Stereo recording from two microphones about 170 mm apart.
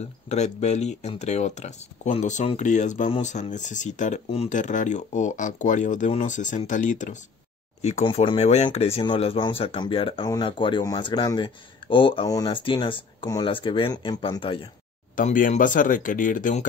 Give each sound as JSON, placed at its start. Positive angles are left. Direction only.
{"t": 0.0, "sound": "speech", "side_deg": 40}
{"t": 15.1, "sound": "speech", "side_deg": 50}